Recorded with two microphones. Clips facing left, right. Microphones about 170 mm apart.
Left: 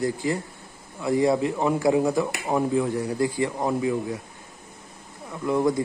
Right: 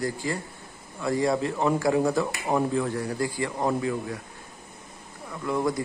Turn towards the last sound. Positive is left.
turn(degrees=15)  # may be behind; listen again after turning